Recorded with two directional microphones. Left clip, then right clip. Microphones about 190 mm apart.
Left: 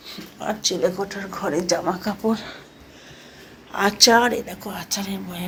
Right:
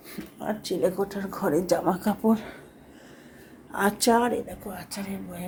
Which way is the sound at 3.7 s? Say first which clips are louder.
Left 7 dB; 20° right (ahead or behind).